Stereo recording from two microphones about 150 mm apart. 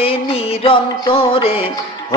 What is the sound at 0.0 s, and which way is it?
Music, 40° left (ahead or behind).